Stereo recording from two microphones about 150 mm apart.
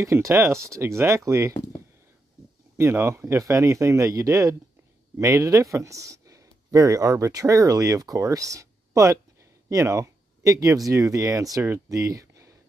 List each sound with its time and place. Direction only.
0.0 s speech: 20° right (ahead or behind)
2.8 s speech: 15° right (ahead or behind)